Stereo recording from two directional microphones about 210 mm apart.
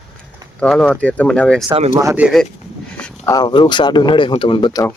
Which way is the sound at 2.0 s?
10° right (ahead or behind).